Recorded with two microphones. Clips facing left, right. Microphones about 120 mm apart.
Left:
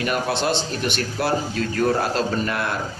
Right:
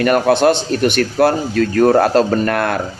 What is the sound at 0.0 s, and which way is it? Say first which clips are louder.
A man's voice: right 10 dB; 55° right (ahead or behind).